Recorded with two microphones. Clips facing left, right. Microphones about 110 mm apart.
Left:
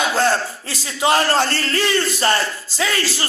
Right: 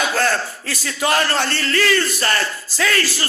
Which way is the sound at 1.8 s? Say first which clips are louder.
Right 1 dB; 25° left (ahead or behind).